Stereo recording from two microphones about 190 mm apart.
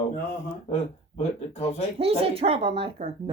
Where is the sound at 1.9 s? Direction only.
30° right (ahead or behind).